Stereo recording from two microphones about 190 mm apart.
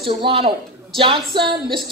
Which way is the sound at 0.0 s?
30° right (ahead or behind).